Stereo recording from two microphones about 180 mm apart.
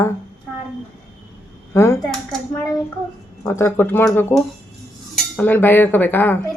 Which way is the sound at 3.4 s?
15° left (ahead or behind).